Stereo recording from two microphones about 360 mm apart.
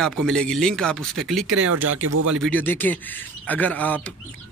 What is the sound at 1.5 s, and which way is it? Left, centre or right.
Speech, right.